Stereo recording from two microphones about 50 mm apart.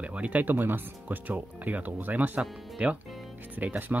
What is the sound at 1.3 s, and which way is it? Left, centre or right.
Speech, right.